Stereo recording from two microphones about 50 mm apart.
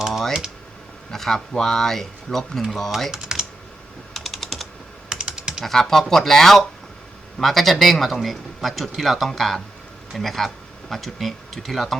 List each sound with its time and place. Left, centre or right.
0.1 s typing: centre
1.1 s speech: centre
3.1 s typing: centre
4.1 s typing: centre
5.0 s typing: centre
5.6 s a man's voice: centre